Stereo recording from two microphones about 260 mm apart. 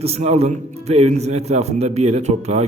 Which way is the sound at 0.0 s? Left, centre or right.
Right.